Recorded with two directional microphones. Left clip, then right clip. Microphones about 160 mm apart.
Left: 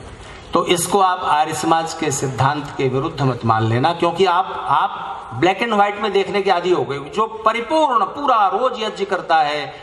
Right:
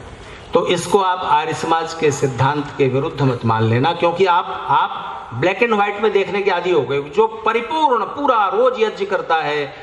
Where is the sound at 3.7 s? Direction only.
30° left (ahead or behind).